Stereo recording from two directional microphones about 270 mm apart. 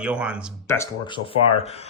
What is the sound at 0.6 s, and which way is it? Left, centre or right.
Speech, centre.